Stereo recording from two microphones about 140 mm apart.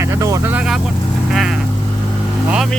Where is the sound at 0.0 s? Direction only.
20° right (ahead or behind).